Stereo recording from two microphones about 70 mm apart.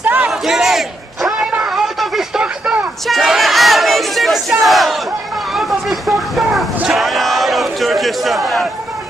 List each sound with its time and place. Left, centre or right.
0.0 s battle cry: right
0.3 s battle cry: centre
1.4 s a sound: centre
3.1 s crowd: centre
4.6 s battle cry: centre
5.5 s vehicle: centre
6.9 s battle cry: centre